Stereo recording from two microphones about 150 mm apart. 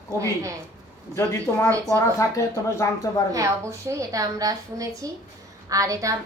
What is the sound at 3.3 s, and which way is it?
A woman's voice, 20° right (ahead or behind).